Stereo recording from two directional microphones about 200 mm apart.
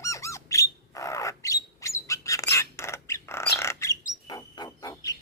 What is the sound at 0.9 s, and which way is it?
Bird, 15° left (ahead or behind).